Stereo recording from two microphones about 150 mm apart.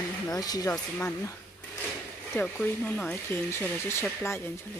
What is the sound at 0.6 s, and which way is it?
Speech, 15° left (ahead or behind).